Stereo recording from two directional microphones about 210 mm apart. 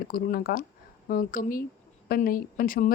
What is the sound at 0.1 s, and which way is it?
A woman's voice, 45° left (ahead or behind).